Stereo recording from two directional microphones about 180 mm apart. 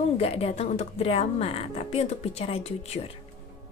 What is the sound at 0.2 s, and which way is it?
A woman's voice, 35° left (ahead or behind).